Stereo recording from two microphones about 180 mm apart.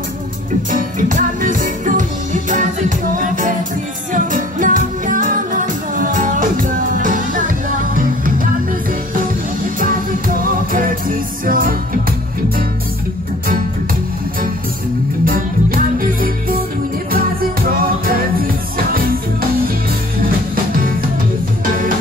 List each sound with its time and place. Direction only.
0.7 s music: 45° right (ahead or behind)
3.2 s music: 45° right (ahead or behind)
9.8 s music: 50° right (ahead or behind)
15.2 s music: 50° right (ahead or behind)
20.5 s music: 50° right (ahead or behind)